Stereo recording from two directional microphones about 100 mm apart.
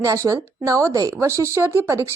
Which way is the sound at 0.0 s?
30° right (ahead or behind).